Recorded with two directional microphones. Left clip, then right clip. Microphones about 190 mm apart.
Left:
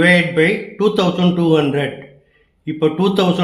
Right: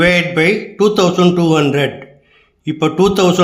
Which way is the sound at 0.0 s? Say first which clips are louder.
Right 1 dB; 30° right (ahead or behind).